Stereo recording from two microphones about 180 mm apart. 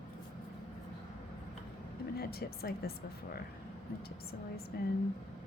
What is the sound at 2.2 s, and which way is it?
A woman's voice, 60° left (ahead or behind).